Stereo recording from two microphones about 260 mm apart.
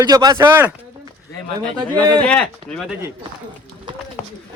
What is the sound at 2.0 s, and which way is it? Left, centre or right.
Speech, centre.